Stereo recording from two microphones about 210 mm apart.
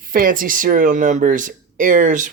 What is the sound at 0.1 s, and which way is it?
Speech, 40° right (ahead or behind).